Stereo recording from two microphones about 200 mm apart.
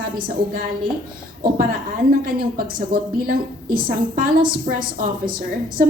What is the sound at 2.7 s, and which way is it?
A woman's voice, 45° right (ahead or behind).